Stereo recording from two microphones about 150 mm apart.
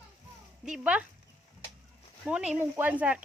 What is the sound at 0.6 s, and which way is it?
Speech, 5° right (ahead or behind).